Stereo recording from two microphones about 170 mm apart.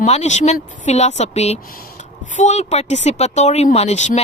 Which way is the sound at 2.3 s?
45° left (ahead or behind).